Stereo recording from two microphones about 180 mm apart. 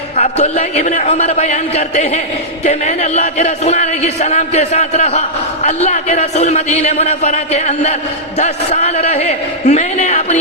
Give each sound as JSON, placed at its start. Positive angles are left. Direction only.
{"t": 0.2, "sound": "speech", "side_deg": 35}